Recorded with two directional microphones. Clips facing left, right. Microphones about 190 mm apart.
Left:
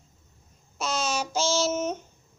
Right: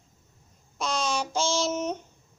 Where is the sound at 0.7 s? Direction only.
5° left (ahead or behind).